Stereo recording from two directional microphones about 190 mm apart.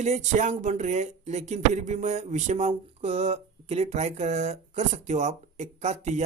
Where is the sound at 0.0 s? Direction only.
35° right (ahead or behind).